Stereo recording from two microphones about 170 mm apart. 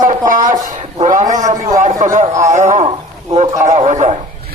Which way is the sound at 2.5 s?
45° right (ahead or behind).